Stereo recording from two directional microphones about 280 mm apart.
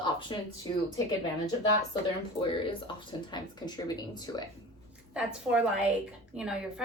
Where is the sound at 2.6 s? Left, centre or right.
Centre.